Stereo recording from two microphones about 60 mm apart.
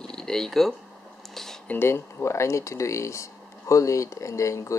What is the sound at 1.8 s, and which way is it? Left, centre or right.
Speech, left.